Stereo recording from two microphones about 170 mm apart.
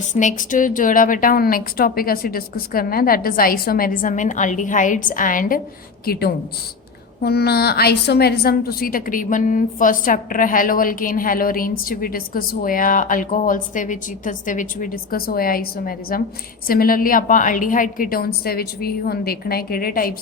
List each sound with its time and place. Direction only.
0.1 s a woman's voice: 45° left (ahead or behind)
6.1 s a woman's voice: 65° left (ahead or behind)